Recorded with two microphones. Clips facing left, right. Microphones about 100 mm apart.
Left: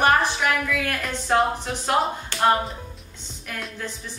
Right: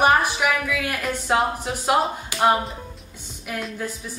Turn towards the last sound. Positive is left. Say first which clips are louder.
# right 3 dB
turn(degrees=-10)  # may be behind; listen again after turning